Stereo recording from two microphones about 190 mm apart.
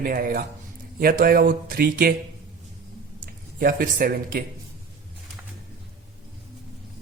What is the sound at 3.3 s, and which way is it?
Speech, 50° right (ahead or behind).